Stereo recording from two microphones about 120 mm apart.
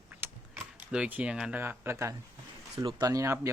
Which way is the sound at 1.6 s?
20° right (ahead or behind).